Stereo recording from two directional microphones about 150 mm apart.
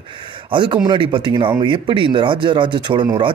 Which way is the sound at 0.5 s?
30° right (ahead or behind).